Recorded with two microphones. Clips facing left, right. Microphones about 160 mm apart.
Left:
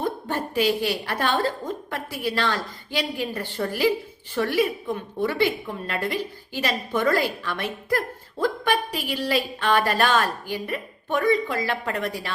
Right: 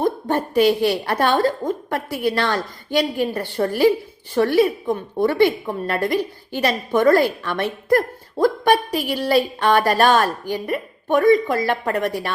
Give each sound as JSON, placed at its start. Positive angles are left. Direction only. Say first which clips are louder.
{"t": 0.5, "sound": "a woman's voice", "louder": "right 6 dB", "side_deg": -45}